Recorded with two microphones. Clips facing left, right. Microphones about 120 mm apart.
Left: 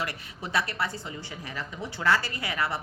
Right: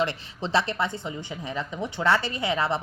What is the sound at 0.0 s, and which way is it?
Speech, 25° right (ahead or behind).